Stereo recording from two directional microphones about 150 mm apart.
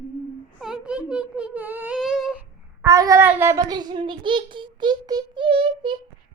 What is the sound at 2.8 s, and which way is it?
Child singing, 20° right (ahead or behind).